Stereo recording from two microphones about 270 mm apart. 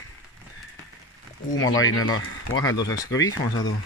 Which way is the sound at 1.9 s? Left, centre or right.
Left.